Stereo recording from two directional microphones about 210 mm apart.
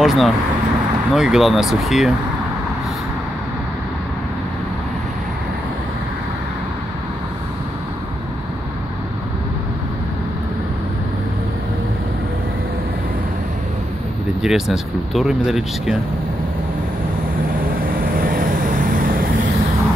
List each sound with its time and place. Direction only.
0.0 s speech: centre (ahead or behind)
14.4 s speech: centre (ahead or behind)
17.7 s vehicle: 45° right (ahead or behind)